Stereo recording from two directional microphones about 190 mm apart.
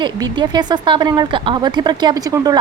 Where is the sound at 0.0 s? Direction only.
25° right (ahead or behind).